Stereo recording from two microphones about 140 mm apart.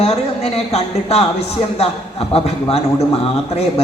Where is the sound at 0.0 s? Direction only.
45° left (ahead or behind).